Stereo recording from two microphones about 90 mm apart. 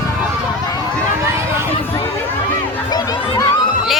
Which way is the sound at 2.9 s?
50° left (ahead or behind).